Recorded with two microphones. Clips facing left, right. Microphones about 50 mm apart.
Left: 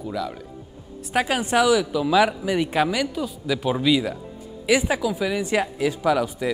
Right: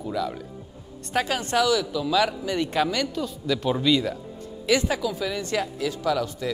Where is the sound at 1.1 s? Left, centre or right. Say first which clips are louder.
Left 3 dB; centre.